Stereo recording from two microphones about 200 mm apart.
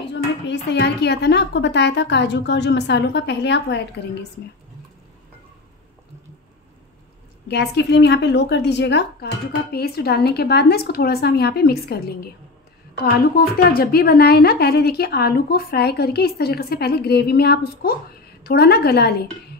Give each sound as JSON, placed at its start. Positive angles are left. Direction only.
{"t": 0.5, "sound": "a woman's voice", "side_deg": 60}
{"t": 7.4, "sound": "a woman's voice", "side_deg": 55}